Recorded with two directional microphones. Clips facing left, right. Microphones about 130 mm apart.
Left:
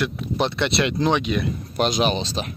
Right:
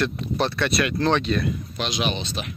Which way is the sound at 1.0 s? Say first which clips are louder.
Right 1 dB; 15° left (ahead or behind).